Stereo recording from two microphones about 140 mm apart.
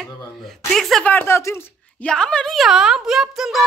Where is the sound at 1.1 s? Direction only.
15° left (ahead or behind).